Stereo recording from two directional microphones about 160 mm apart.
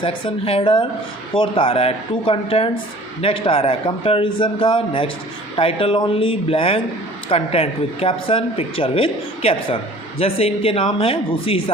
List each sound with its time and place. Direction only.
0.0 s speech: 30° left (ahead or behind)